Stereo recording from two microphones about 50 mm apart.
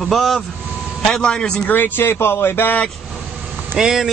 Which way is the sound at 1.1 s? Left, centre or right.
Centre.